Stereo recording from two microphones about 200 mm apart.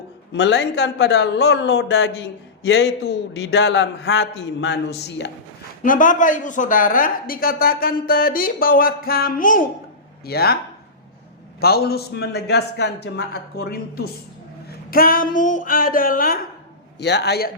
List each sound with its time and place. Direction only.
0.3 s a man's voice: 60° left (ahead or behind)
5.8 s a woman's voice: 40° left (ahead or behind)
11.6 s a woman's voice: 50° left (ahead or behind)
17.0 s a man's voice: 60° left (ahead or behind)